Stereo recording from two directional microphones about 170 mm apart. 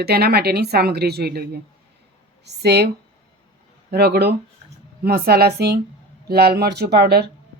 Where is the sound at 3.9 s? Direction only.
70° right (ahead or behind).